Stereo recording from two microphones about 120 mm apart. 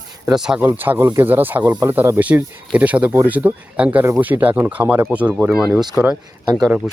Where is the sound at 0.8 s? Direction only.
20° right (ahead or behind).